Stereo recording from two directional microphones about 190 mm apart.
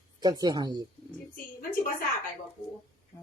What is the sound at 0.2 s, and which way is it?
Speech, 20° right (ahead or behind).